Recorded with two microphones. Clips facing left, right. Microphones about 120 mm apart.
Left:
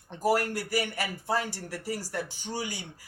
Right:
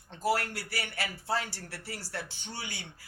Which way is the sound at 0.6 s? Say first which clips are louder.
Left 7 dB; 15° left (ahead or behind).